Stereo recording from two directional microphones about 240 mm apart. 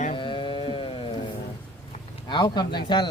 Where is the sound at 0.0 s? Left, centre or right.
Left.